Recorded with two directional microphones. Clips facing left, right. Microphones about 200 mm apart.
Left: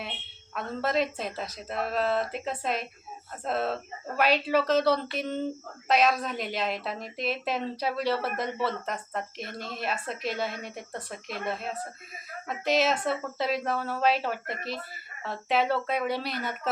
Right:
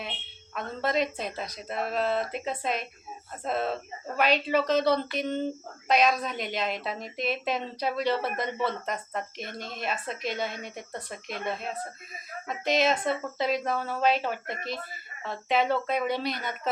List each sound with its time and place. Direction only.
0.5 s a woman's voice: 5° left (ahead or behind)